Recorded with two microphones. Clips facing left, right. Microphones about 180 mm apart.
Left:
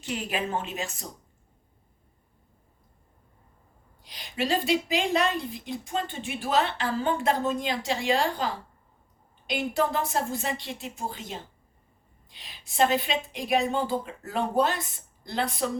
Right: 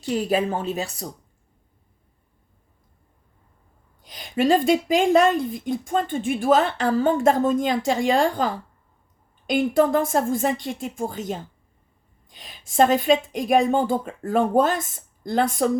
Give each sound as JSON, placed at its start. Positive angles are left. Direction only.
{"t": 0.0, "sound": "speech", "side_deg": -35}
{"t": 4.0, "sound": "a woman's voice", "side_deg": -50}